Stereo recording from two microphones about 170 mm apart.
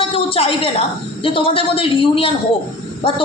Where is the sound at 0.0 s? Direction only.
35° left (ahead or behind).